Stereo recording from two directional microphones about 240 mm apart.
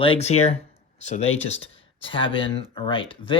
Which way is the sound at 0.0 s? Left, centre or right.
Left.